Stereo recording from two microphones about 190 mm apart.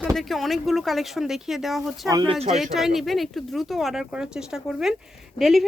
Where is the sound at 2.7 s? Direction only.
Centre (ahead or behind).